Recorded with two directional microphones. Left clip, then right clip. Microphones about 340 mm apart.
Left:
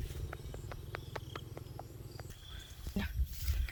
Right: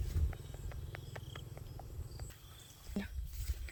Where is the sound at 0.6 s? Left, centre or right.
Centre.